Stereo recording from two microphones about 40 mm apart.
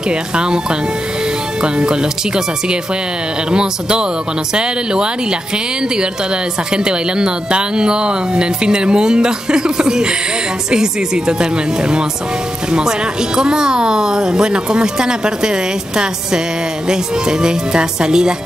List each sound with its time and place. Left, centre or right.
0.1 s speech: right
6.7 s speech: right
13.4 s speech: centre